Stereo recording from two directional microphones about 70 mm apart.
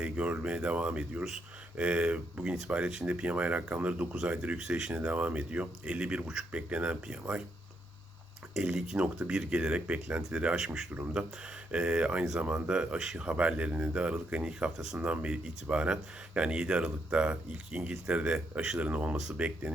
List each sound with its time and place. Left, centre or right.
0.0 s speech: centre
8.5 s speech: centre
11.7 s speech: centre